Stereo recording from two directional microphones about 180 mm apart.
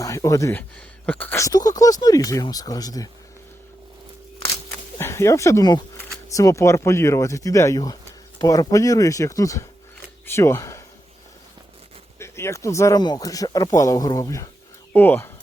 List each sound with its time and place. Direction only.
0.0 s speech: 20° left (ahead or behind)
4.9 s speech: 15° left (ahead or behind)
12.2 s speech: 15° left (ahead or behind)